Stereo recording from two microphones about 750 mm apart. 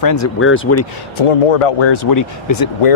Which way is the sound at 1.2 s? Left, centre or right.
Left.